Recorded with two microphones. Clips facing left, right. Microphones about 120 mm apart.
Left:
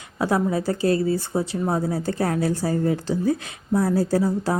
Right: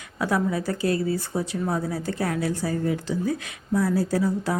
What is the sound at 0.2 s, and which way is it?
A woman's voice, 30° left (ahead or behind).